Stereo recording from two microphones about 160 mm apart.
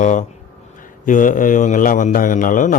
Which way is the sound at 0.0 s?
50° left (ahead or behind).